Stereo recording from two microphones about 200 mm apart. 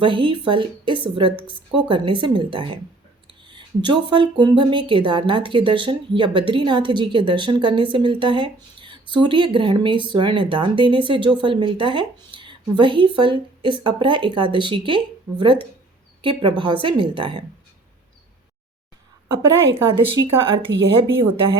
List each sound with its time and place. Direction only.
0.0 s speech: 25° right (ahead or behind)
20.1 s speech: 25° right (ahead or behind)